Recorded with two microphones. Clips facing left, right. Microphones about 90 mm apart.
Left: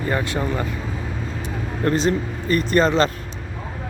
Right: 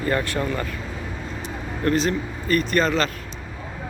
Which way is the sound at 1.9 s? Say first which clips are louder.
Left 2 dB; 30° left (ahead or behind).